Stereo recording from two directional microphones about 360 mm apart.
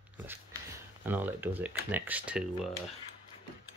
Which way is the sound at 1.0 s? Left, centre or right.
Centre.